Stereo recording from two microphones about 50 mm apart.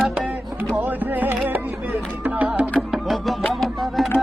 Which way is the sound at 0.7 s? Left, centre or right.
Right.